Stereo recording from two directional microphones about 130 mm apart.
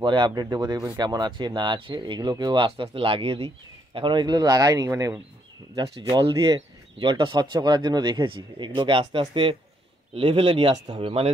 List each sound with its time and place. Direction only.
0.0 s speech: 35° right (ahead or behind)